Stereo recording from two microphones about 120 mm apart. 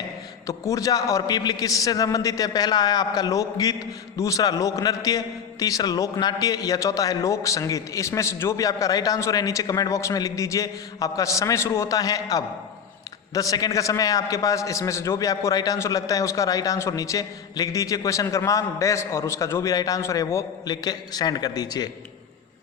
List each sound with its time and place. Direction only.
0.4 s a man's voice: 30° left (ahead or behind)